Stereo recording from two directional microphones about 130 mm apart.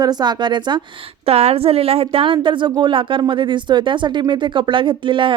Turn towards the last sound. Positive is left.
turn(degrees=-40)  # may be behind; listen again after turning